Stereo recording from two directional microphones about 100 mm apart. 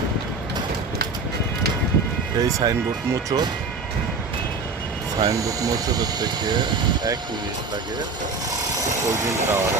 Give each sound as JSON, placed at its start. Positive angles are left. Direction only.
{"t": 2.4, "sound": "speech", "side_deg": -35}
{"t": 5.2, "sound": "speech", "side_deg": -35}
{"t": 9.0, "sound": "speech", "side_deg": -25}